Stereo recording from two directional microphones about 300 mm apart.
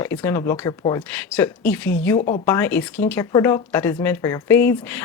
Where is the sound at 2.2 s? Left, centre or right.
Left.